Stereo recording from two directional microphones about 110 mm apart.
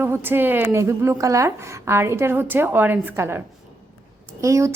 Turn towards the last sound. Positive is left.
turn(degrees=-30)  # may be behind; listen again after turning